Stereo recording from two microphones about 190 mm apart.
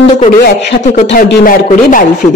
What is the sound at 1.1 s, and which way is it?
Speech, 50° left (ahead or behind).